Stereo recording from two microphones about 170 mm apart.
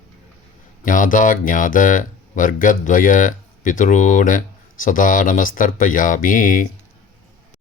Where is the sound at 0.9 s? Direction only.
50° left (ahead or behind).